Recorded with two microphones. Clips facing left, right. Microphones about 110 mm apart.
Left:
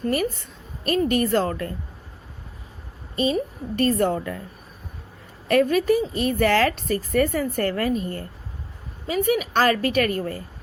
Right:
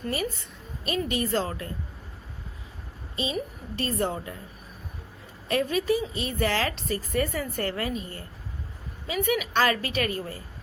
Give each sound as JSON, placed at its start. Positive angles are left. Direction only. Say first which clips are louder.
{"t": 0.1, "sound": "a woman's voice", "louder": "left 4 dB", "side_deg": 50}
{"t": 3.8, "sound": "a woman's voice", "louder": "left 7 dB", "side_deg": 55}
{"t": 5.5, "sound": "a woman's voice", "louder": "left 6 dB", "side_deg": 55}